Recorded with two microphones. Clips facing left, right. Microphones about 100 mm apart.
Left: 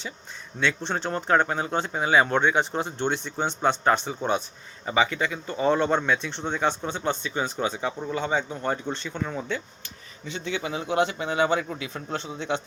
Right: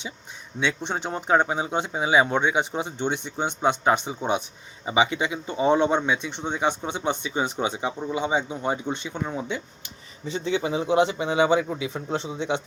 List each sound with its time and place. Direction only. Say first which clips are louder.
0.6 s a man's voice: even; 15° right (ahead or behind)
10.2 s a man's voice: right 5 dB; 30° right (ahead or behind)